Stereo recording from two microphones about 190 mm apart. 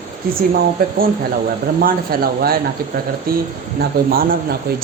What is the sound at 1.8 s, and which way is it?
Speech, 50° right (ahead or behind).